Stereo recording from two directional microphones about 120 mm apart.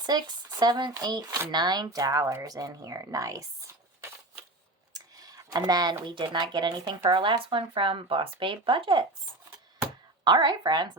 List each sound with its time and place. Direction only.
0.0 s speech: 35° right (ahead or behind)
4.9 s speech: 30° right (ahead or behind)
10.2 s speech: 40° right (ahead or behind)